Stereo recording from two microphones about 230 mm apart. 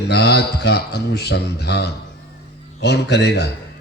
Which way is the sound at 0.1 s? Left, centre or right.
Left.